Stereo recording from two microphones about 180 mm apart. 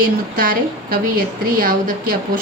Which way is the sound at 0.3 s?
55° right (ahead or behind).